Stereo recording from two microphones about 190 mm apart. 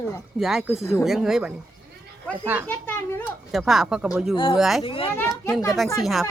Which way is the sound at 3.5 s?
Centre (ahead or behind).